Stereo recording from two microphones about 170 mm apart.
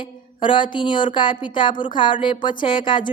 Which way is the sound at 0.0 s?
30° left (ahead or behind).